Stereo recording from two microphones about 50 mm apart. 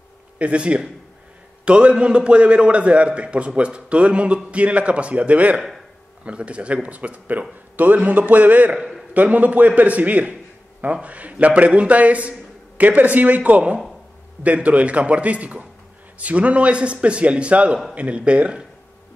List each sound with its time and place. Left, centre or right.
0.4 s a man's voice: right